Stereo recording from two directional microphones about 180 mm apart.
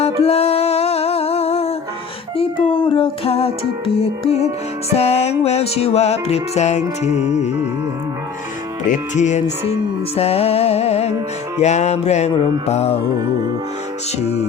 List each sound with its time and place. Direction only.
0.0 s music: 35° left (ahead or behind)
8.9 s music: 40° left (ahead or behind)
14.2 s music: 35° left (ahead or behind)